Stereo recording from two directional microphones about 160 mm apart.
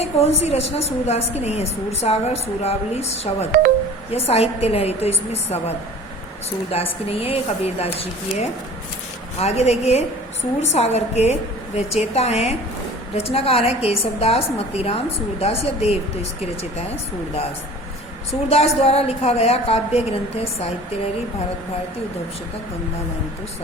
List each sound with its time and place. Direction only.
0.0 s a woman's voice: 40° left (ahead or behind)
6.7 s a woman's voice: 40° left (ahead or behind)
18.4 s a woman's voice: 40° left (ahead or behind)